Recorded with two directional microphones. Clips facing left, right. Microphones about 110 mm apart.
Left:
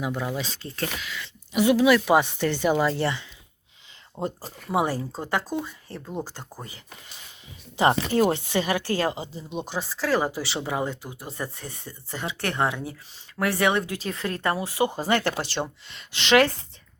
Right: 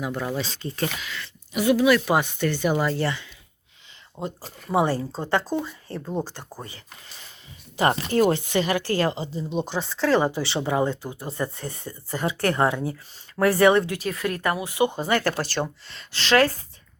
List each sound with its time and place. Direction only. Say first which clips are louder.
0.0 s speech: right 1 dB; 5° left (ahead or behind)
1.5 s speech: even; 25° left (ahead or behind)
4.2 s speech: left 2 dB; 35° left (ahead or behind)
4.7 s speech: right 2 dB; 15° left (ahead or behind)
6.6 s speech: right 2 dB; 15° left (ahead or behind); by 13.8 s centre (ahead or behind)
13.8 s speech: right 3 dB; 20° left (ahead or behind)